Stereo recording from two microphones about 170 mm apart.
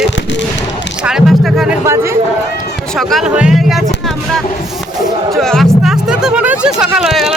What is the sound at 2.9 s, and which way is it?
Speech, centre (ahead or behind).